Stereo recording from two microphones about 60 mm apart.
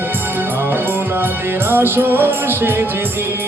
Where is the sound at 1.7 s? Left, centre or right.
Right.